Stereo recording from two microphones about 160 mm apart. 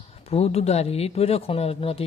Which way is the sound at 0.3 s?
40° left (ahead or behind).